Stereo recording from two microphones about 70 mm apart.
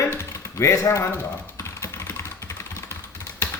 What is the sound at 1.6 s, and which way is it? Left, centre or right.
Typing, left.